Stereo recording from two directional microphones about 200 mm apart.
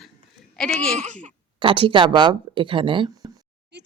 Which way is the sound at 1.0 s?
35° right (ahead or behind).